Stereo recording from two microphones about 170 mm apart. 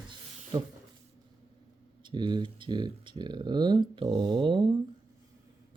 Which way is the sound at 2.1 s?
25° right (ahead or behind).